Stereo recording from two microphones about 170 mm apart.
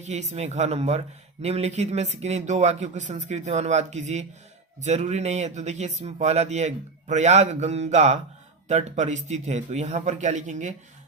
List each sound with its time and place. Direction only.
0.0 s speech: 40° right (ahead or behind)